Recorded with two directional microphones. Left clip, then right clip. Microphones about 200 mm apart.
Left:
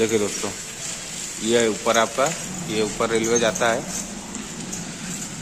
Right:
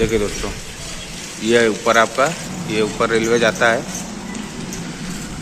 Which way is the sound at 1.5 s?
15° left (ahead or behind).